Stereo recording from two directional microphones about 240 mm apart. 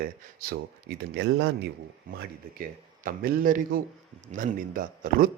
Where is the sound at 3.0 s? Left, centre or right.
Right.